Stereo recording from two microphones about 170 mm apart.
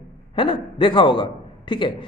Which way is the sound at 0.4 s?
30° left (ahead or behind).